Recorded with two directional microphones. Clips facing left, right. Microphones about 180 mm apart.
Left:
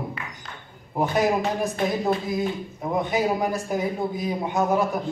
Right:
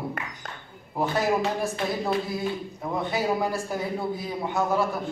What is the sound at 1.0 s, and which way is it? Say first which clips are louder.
A man's voice: left 2 dB; 20° left (ahead or behind).